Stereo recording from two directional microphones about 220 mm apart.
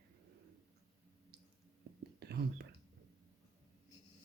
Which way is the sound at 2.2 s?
45° right (ahead or behind).